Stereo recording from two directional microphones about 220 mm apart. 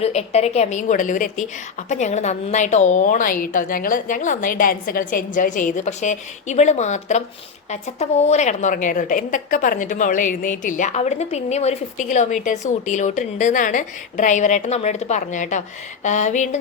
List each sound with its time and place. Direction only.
0.0 s a woman's voice: 30° left (ahead or behind)